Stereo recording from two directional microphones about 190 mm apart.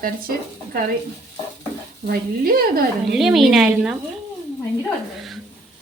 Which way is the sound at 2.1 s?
50° right (ahead or behind).